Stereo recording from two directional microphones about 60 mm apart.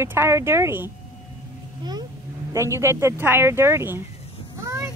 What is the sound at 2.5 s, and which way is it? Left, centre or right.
Speech, right.